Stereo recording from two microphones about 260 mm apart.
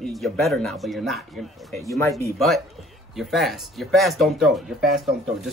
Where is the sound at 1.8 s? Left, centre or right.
Centre.